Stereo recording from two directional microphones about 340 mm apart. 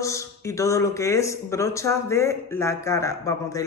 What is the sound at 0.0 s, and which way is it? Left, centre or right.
Speech, centre.